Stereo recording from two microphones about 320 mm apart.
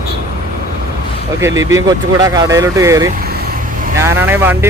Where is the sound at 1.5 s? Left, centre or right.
Right.